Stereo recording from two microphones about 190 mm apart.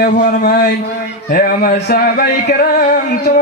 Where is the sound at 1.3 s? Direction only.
50° left (ahead or behind).